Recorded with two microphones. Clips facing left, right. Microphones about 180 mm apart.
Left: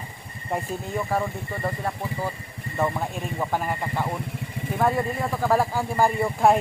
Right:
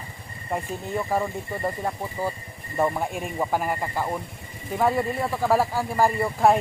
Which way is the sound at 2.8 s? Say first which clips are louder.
Right 2 dB; 10° right (ahead or behind).